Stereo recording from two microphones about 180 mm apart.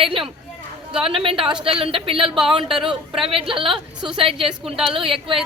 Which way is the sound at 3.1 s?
30° right (ahead or behind).